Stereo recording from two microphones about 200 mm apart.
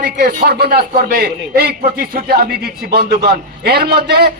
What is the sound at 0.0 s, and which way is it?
A man's voice, 50° right (ahead or behind).